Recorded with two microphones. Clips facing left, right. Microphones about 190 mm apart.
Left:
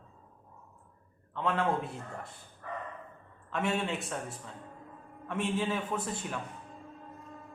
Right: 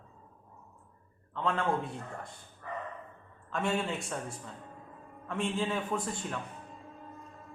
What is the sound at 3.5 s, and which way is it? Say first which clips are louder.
A man's voice: even; 5° left (ahead or behind).